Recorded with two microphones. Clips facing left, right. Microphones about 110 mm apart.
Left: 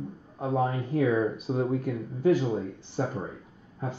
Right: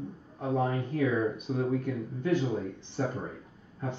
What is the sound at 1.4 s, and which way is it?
Speech, 30° left (ahead or behind).